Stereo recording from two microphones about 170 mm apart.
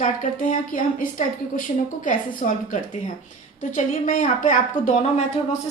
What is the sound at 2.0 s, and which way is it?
A woman's voice, 50° left (ahead or behind).